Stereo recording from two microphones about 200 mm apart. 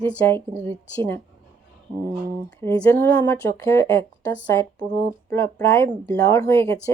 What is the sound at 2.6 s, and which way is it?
Speech, 15° left (ahead or behind).